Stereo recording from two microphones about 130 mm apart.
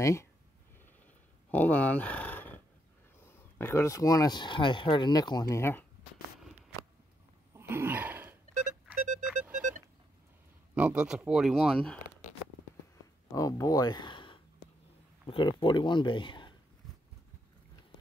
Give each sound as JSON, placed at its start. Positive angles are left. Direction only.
{"t": 0.0, "sound": "speech", "side_deg": 20}
{"t": 1.5, "sound": "speech", "side_deg": 10}
{"t": 7.5, "sound": "a sound", "side_deg": -15}
{"t": 8.8, "sound": "music", "side_deg": -5}
{"t": 9.6, "sound": "a sound", "side_deg": -85}
{"t": 10.7, "sound": "speech", "side_deg": -10}
{"t": 13.3, "sound": "speech", "side_deg": 25}